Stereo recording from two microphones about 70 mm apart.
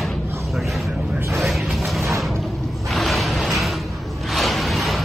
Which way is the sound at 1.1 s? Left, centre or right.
Right.